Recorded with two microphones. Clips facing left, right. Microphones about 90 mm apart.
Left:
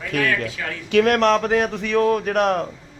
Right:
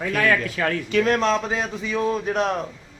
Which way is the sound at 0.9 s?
60° left (ahead or behind).